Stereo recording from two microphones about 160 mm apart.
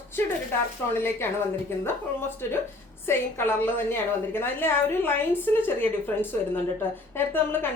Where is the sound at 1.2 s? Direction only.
15° left (ahead or behind).